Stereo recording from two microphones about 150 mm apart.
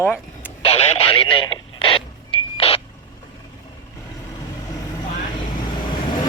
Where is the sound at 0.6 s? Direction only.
45° left (ahead or behind).